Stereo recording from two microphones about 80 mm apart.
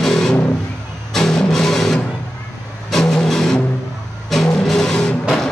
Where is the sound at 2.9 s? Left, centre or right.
Centre.